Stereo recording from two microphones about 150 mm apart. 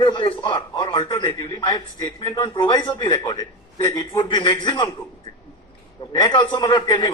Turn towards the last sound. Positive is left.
turn(degrees=30)  # may be behind; listen again after turning